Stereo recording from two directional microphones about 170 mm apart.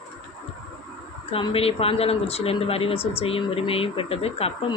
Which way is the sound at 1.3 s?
30° left (ahead or behind).